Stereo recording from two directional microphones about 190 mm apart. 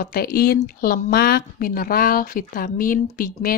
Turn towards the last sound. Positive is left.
turn(degrees=50)  # may be behind; listen again after turning